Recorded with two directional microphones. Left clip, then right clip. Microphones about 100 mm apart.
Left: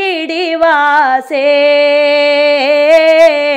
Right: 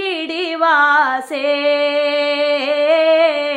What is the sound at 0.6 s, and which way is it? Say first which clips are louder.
Female singing: left 3 dB; 40° left (ahead or behind).